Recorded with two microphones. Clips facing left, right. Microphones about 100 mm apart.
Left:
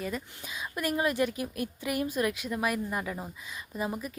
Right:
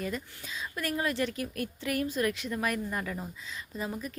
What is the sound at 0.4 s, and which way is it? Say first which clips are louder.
A woman's voice: left 4 dB; 15° left (ahead or behind).